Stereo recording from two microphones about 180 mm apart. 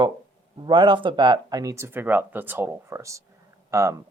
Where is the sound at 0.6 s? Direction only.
25° right (ahead or behind).